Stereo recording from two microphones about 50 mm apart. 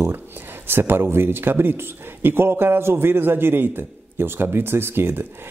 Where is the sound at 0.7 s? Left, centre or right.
Right.